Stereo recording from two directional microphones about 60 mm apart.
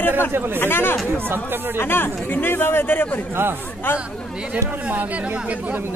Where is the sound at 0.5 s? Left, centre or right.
Left.